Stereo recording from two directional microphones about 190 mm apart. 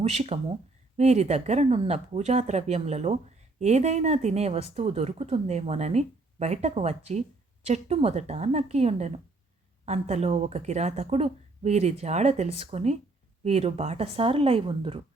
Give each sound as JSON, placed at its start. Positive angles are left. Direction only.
{"t": 0.0, "sound": "speech", "side_deg": -35}